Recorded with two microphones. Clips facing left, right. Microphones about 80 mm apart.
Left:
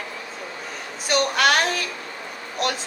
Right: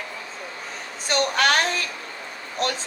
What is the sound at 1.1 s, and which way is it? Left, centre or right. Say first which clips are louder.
Speech: left 1 dB; right.